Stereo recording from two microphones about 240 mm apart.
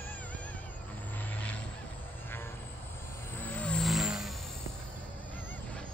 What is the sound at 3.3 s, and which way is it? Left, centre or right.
Vehicle, centre.